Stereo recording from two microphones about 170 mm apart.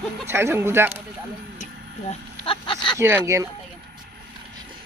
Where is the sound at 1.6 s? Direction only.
35° left (ahead or behind).